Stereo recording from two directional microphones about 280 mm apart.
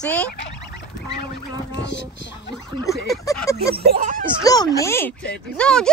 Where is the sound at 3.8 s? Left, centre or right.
Right.